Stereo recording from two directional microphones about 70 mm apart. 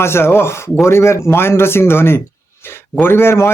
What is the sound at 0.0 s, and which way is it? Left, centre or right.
A man's voice, left.